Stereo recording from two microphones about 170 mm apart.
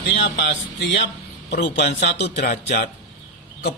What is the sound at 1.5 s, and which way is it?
Speech, 80° left.